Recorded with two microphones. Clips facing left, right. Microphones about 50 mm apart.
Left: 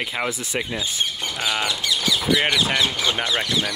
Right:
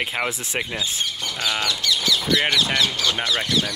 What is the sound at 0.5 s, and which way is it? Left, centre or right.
Speech, right.